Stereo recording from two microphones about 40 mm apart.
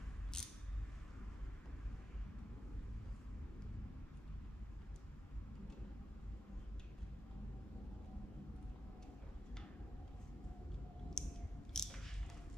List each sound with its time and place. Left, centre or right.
0.3 s a sound: centre
11.2 s scissors: centre
11.7 s biting: centre